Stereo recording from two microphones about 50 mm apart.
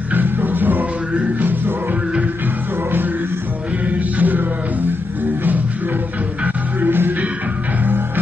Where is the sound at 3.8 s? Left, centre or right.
Right.